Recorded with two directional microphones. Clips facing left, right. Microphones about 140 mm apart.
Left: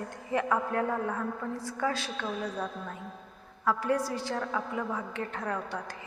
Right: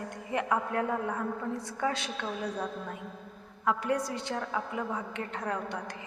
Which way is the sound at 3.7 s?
20° right (ahead or behind).